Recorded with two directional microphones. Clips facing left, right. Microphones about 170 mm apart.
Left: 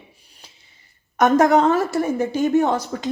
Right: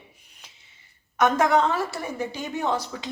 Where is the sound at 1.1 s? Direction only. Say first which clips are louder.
Left 5 dB; 40° left (ahead or behind).